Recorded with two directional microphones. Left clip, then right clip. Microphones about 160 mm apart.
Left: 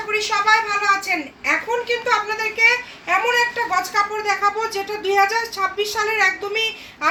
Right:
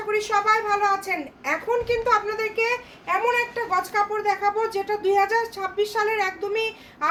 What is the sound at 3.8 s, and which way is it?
Speech, 10° right (ahead or behind).